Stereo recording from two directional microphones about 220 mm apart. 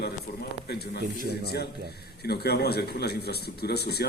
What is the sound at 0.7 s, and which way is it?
A man's voice, 45° left (ahead or behind).